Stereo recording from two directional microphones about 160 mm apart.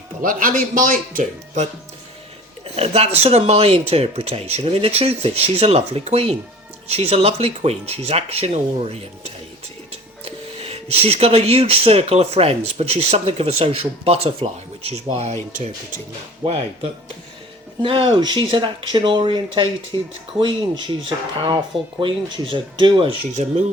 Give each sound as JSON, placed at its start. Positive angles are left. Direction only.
{"t": 0.2, "sound": "speech", "side_deg": -60}
{"t": 2.7, "sound": "speech", "side_deg": -40}
{"t": 17.8, "sound": "speech", "side_deg": -35}